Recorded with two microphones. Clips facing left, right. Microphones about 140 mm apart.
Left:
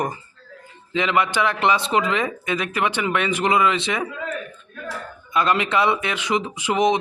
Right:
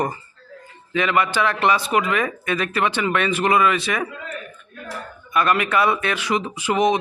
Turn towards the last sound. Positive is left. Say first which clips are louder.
# even
turn(degrees=20)  # may be behind; listen again after turning